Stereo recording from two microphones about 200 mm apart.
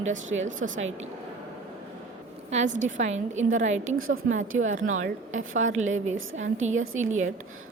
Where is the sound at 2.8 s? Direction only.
40° right (ahead or behind).